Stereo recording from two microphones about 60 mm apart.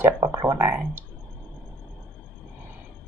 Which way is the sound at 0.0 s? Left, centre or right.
Right.